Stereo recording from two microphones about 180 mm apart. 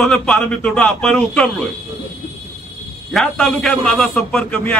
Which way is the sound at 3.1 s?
Centre (ahead or behind).